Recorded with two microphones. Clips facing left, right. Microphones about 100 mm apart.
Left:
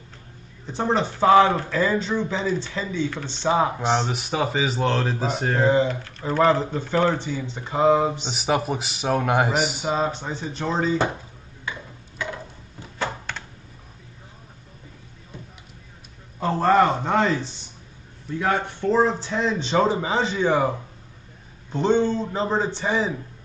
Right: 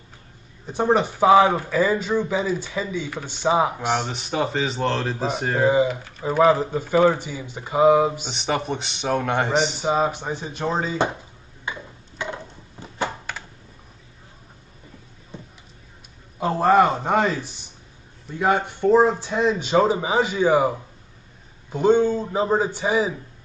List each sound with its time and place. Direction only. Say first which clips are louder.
0.7 s speech: right 3 dB; 15° right (ahead or behind)
4.1 s speech: even; 5° left (ahead or behind)
8.3 s a man's voice: left 1 dB; 5° left (ahead or behind)
9.8 s speech: right 3 dB; 10° right (ahead or behind)
11.6 s tick-tock: right 1 dB; 20° right (ahead or behind)
13.3 s a sound: even; 5° right (ahead or behind)
16.3 s a sound: right 1 dB; 10° right (ahead or behind)
17.0 s speech: even; 15° right (ahead or behind)